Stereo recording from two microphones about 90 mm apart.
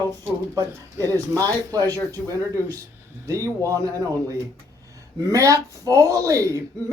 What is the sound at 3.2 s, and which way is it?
Speech, 35° right (ahead or behind).